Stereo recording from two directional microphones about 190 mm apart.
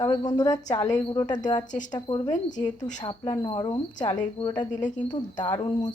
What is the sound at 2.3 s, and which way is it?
Speech, 40° left (ahead or behind).